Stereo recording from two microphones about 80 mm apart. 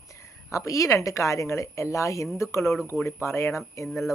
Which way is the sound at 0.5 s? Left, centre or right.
Left.